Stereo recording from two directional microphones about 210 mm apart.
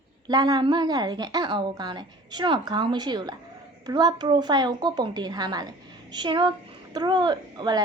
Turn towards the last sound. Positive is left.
turn(degrees=-20)  # may be behind; listen again after turning